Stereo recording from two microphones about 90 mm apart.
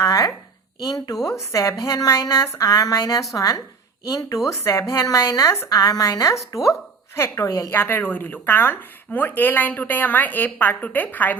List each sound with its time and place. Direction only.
0.0 s a sound: 40° left (ahead or behind)
0.9 s speech: 45° left (ahead or behind)
1.3 s a woman's voice: 35° left (ahead or behind)
7.7 s a woman's voice: 25° left (ahead or behind)